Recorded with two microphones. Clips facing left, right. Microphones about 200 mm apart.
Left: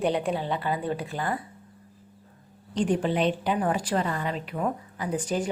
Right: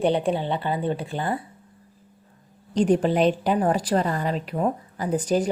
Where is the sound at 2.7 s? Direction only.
40° right (ahead or behind).